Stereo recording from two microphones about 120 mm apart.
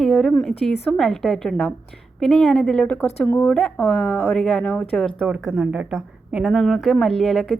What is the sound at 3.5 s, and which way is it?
Speech, 10° left (ahead or behind).